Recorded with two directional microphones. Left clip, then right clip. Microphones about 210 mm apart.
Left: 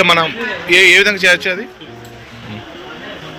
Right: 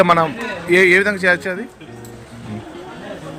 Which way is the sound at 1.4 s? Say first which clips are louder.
Left 6 dB; 10° right (ahead or behind).